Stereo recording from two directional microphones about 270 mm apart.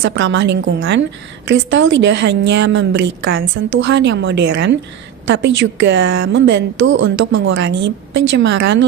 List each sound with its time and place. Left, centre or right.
0.0 s a woman's voice: right